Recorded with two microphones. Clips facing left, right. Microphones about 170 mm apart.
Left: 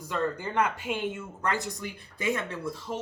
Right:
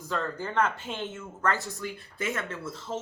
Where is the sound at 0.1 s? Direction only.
15° left (ahead or behind).